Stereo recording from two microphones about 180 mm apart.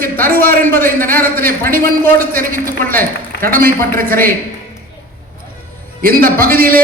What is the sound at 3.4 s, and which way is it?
Speech, 55° right (ahead or behind).